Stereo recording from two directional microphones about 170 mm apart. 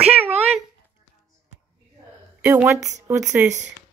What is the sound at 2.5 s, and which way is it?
Speech, 15° right (ahead or behind).